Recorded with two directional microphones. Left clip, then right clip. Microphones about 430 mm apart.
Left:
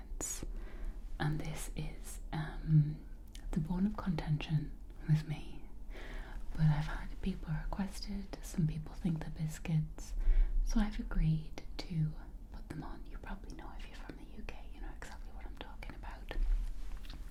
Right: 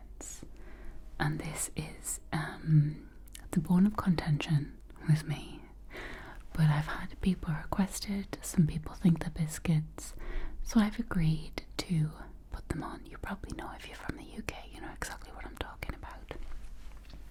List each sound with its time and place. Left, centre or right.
0.2 s whispering: centre
1.1 s whispering: centre
3.5 s speech: right
13.6 s whispering: right; by 16.4 s centre